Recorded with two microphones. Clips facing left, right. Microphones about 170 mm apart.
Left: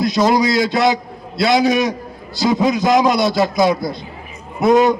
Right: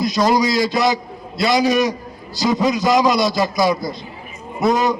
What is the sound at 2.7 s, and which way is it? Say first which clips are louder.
A man's voice: left 1 dB; 60° left (ahead or behind).